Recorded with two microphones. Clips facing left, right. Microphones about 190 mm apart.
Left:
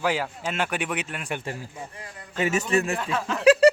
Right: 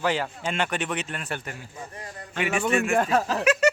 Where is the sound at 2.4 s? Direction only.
40° left (ahead or behind).